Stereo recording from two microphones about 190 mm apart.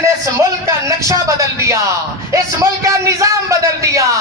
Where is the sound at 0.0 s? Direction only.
15° right (ahead or behind).